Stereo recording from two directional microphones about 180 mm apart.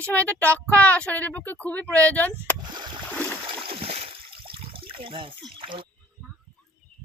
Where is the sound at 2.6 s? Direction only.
25° right (ahead or behind).